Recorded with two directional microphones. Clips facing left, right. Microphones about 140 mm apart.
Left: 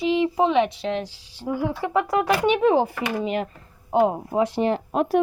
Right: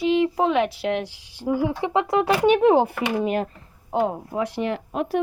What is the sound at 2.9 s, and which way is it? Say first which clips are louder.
Speech: right 2 dB; 50° right (ahead or behind).